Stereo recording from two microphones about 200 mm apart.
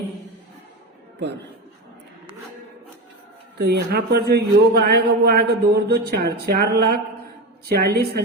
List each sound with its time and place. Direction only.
3.6 s a man's voice: 55° right (ahead or behind)